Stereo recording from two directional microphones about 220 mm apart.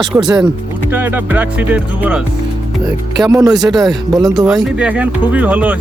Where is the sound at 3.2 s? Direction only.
15° right (ahead or behind).